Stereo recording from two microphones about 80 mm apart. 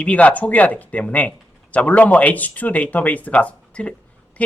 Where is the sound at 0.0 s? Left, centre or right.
Centre.